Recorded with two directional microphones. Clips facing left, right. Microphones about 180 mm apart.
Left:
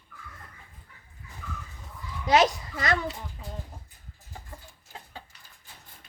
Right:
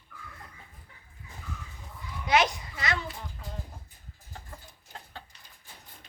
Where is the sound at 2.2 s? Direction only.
40° left (ahead or behind).